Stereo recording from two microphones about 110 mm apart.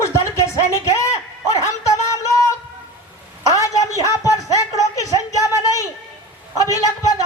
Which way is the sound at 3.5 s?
30° left (ahead or behind).